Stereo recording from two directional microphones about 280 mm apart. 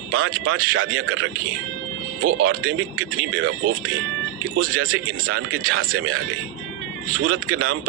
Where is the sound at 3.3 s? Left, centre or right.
Right.